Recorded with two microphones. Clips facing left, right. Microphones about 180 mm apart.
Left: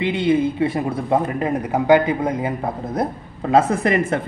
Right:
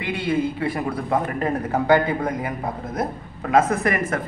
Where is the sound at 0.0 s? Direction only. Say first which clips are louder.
Left 5 dB; 20° left (ahead or behind).